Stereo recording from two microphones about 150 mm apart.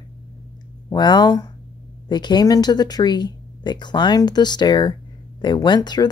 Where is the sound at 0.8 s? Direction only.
30° left (ahead or behind).